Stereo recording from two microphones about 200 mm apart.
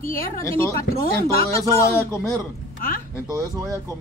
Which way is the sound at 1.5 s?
15° left (ahead or behind).